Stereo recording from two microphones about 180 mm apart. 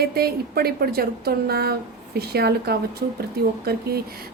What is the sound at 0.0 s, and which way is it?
A woman's voice, 60° right (ahead or behind).